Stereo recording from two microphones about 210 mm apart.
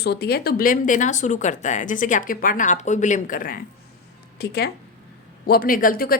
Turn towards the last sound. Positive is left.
turn(degrees=45)  # may be behind; listen again after turning